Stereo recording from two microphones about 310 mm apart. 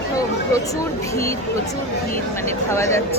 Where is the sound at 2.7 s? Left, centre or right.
Centre.